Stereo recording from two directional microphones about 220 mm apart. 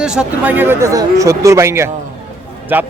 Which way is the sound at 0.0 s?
5° right (ahead or behind).